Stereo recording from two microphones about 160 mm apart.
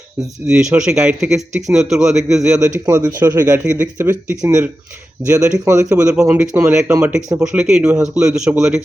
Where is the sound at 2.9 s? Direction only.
20° right (ahead or behind).